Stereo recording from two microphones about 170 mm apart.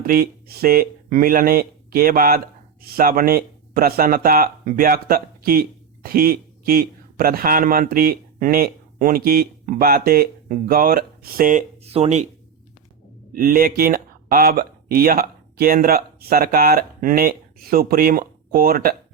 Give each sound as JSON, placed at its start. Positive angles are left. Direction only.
{"t": 0.0, "sound": "speech", "side_deg": -60}
{"t": 11.8, "sound": "speech", "side_deg": -35}
{"t": 13.3, "sound": "speech", "side_deg": -60}